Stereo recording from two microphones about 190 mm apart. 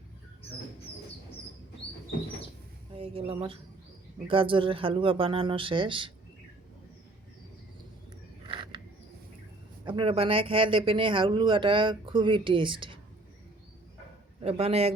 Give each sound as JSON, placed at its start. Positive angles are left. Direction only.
{"t": 2.9, "sound": "speech", "side_deg": -30}
{"t": 8.4, "sound": "a sound", "side_deg": -25}
{"t": 9.8, "sound": "speech", "side_deg": -25}
{"t": 14.4, "sound": "a man's voice", "side_deg": -30}